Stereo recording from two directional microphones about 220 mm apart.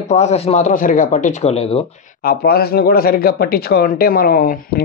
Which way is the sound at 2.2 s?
40° left (ahead or behind).